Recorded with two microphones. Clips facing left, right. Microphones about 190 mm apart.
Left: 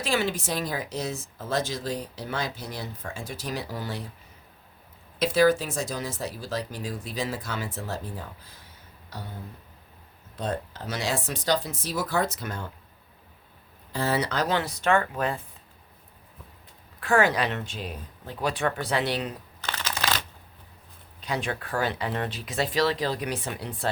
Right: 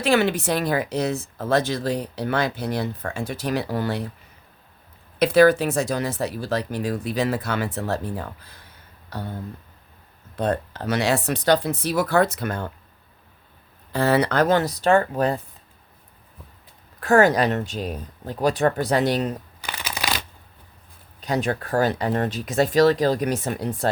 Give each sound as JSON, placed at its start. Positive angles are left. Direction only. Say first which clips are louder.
{"t": 0.0, "sound": "speech", "louder": "right 7 dB", "side_deg": -65}
{"t": 5.2, "sound": "speech", "louder": "right 6 dB", "side_deg": -65}
{"t": 10.3, "sound": "speech", "louder": "right 7 dB", "side_deg": -60}
{"t": 13.9, "sound": "speech", "louder": "right 7 dB", "side_deg": -65}
{"t": 17.0, "sound": "speech", "louder": "right 6 dB", "side_deg": -45}
{"t": 19.6, "sound": "shuffling cards", "louder": "even", "side_deg": -10}
{"t": 21.2, "sound": "speech", "louder": "right 6 dB", "side_deg": -40}